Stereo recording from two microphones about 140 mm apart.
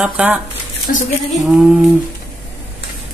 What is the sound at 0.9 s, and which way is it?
Speech, 90° left.